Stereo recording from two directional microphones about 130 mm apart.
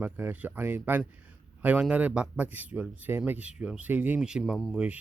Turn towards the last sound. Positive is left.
turn(degrees=-5)  # may be behind; listen again after turning